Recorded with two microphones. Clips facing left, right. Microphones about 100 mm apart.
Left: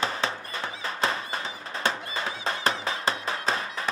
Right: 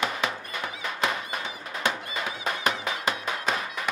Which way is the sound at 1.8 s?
30° left (ahead or behind).